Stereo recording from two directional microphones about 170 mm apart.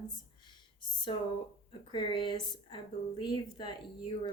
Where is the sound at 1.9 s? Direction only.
30° left (ahead or behind).